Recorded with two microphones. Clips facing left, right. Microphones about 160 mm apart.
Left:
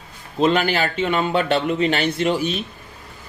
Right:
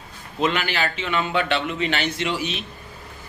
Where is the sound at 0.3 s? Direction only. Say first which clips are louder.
Left 5 dB; 35° left (ahead or behind).